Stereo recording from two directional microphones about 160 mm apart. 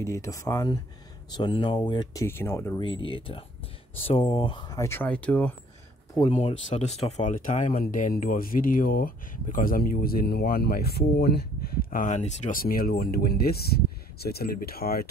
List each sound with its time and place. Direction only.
0.0 s speech: 20° left (ahead or behind)
1.3 s speech: 30° left (ahead or behind)
2.2 s speech: 15° left (ahead or behind)
2.8 s speech: 30° left (ahead or behind)
4.7 s speech: 15° left (ahead or behind)
6.3 s speech: 40° left (ahead or behind)
12.6 s speech: 65° left (ahead or behind)